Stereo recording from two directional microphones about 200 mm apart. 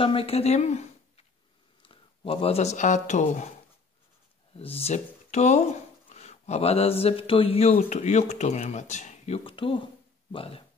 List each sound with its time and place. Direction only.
0.0 s speech: 30° left (ahead or behind)
4.6 s speech: 30° left (ahead or behind)